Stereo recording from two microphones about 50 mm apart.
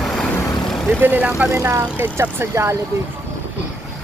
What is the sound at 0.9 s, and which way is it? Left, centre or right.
Speech, right.